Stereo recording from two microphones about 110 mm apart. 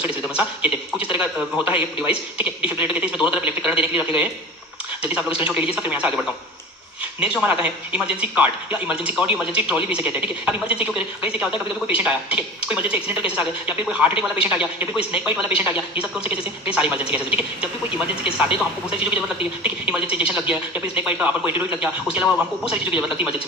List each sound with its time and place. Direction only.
0.0 s a man's voice: 15° right (ahead or behind)
7.2 s a man's voice: 10° right (ahead or behind)